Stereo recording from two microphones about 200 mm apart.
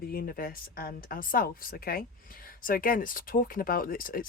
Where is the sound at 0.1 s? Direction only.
45° left (ahead or behind).